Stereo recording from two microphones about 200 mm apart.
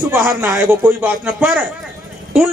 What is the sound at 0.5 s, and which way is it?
A man's voice, 10° right (ahead or behind).